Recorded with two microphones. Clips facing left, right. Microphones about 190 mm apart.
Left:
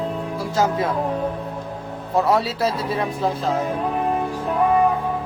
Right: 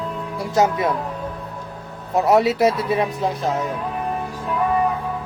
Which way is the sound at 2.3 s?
20° right (ahead or behind).